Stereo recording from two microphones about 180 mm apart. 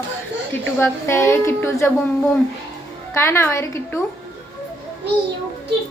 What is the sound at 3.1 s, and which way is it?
Speech, 15° left (ahead or behind).